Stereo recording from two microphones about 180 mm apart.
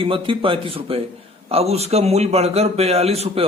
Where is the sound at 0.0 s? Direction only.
30° right (ahead or behind).